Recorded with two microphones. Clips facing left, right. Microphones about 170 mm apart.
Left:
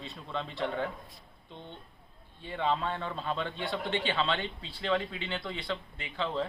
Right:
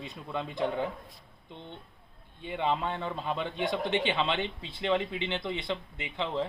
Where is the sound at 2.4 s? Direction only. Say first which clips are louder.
Right 1 dB; 15° right (ahead or behind).